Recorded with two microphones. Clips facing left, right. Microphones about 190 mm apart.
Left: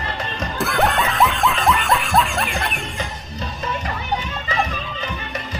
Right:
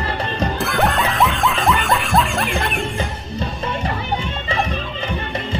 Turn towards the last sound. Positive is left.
turn(degrees=-30)  # may be behind; listen again after turning